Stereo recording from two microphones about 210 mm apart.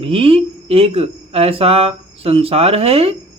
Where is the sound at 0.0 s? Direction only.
25° right (ahead or behind).